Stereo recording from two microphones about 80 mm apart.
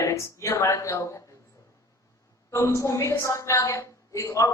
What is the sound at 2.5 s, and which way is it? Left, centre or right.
A woman's voice, left.